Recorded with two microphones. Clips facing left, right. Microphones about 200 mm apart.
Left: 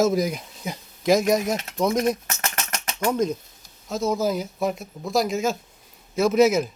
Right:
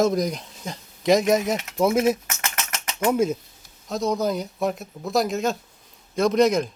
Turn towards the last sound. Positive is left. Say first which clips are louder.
# left 1 dB
turn(degrees=5)  # may be behind; listen again after turning